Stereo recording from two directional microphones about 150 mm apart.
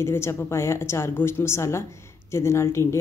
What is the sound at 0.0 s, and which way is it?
A woman's voice, 15° left (ahead or behind).